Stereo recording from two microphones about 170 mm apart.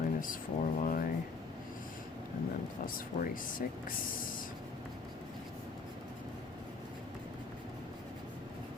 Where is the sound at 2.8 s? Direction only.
55° left (ahead or behind).